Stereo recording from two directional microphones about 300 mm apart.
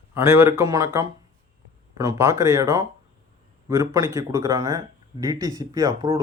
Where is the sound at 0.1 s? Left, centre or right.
Centre.